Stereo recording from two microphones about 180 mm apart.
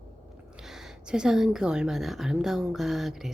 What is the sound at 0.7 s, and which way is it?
A woman's voice, 5° right (ahead or behind).